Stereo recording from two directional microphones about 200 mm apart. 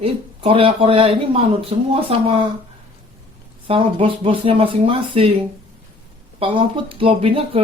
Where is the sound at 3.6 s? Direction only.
25° right (ahead or behind).